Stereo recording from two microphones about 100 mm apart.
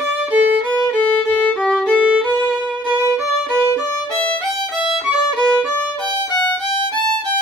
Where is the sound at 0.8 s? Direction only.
15° left (ahead or behind).